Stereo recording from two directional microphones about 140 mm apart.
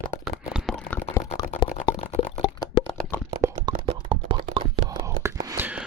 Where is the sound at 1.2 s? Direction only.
20° left (ahead or behind).